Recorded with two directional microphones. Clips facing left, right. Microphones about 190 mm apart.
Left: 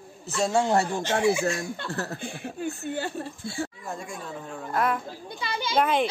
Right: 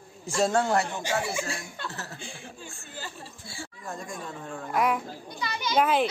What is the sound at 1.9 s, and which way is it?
Speech, 55° left (ahead or behind).